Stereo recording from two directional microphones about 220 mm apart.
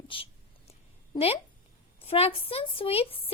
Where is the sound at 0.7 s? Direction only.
25° left (ahead or behind).